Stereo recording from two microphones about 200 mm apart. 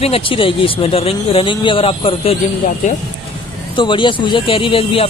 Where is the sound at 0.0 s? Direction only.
25° left (ahead or behind).